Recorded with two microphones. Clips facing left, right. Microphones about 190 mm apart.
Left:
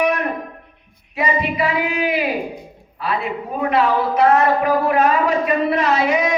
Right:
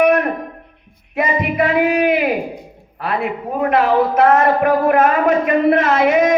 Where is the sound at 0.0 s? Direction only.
55° right (ahead or behind).